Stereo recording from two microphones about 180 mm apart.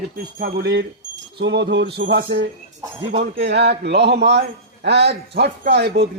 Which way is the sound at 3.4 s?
70° right (ahead or behind).